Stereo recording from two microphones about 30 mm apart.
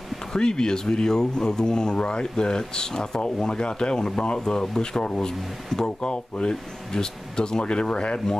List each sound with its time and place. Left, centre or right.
0.4 s speech: left